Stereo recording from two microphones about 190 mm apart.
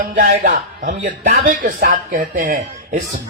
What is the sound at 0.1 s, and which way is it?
Speech, 40° right (ahead or behind).